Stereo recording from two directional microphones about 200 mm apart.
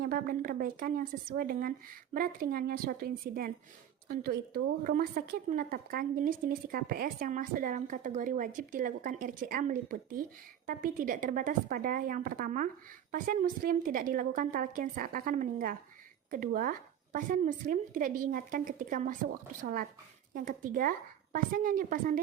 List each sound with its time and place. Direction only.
0.0 s a woman's voice: 45° right (ahead or behind)